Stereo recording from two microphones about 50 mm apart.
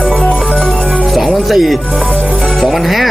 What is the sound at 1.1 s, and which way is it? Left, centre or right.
Music, centre.